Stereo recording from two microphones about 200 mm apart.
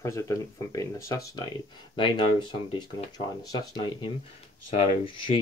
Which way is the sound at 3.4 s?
20° left (ahead or behind).